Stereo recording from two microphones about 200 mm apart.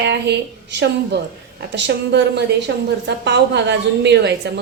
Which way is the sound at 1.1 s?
60° right (ahead or behind).